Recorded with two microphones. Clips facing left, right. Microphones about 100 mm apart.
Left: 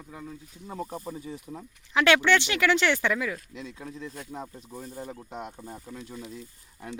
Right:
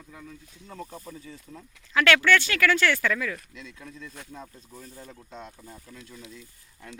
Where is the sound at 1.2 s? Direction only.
15° left (ahead or behind).